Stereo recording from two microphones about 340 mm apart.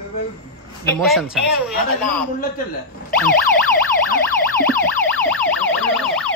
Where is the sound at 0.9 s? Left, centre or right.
Centre.